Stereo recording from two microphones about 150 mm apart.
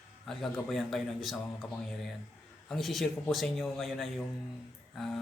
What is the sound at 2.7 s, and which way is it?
Speech, centre (ahead or behind).